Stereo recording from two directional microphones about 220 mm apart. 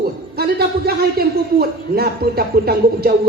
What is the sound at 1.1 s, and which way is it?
Speech, 45° right (ahead or behind).